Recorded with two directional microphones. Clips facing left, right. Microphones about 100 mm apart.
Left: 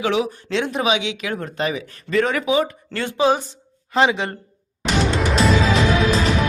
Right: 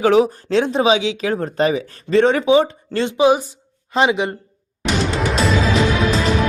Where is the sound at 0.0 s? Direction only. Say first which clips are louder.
Right 7 dB; 40° right (ahead or behind); by 4.4 s 15° right (ahead or behind).